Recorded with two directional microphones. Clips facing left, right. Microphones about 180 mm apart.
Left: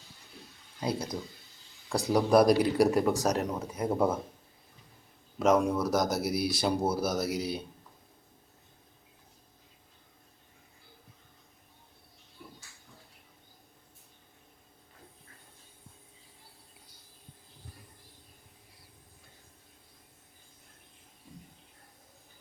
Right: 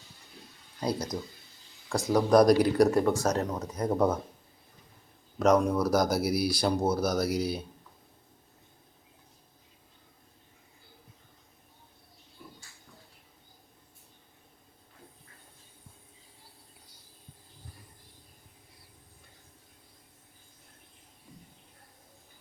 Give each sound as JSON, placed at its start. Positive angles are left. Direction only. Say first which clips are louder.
{"t": 0.8, "sound": "speech", "louder": "right 1 dB", "side_deg": 5}
{"t": 5.4, "sound": "speech", "louder": "right 2 dB", "side_deg": 5}